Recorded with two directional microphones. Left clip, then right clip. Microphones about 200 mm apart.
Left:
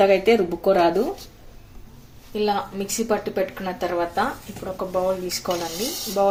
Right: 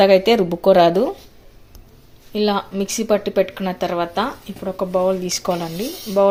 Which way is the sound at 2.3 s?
35° right (ahead or behind).